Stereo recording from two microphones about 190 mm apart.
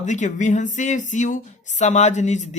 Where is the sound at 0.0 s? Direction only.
40° left (ahead or behind).